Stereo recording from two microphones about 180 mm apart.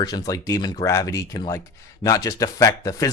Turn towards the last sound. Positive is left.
turn(degrees=20)  # may be behind; listen again after turning